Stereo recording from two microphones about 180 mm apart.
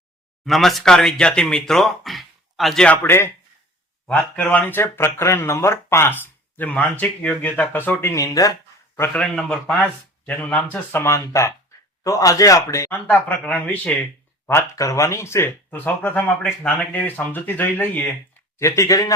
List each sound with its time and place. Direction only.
0.4 s speech: centre (ahead or behind); by 8.5 s 20° left (ahead or behind)
9.0 s speech: 5° left (ahead or behind)